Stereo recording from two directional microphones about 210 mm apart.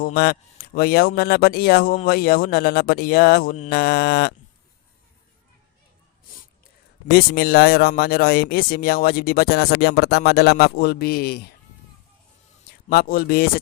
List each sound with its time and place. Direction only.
0.0 s speech: 45° left (ahead or behind)
7.1 s speech: 45° left (ahead or behind)
12.9 s speech: 45° left (ahead or behind)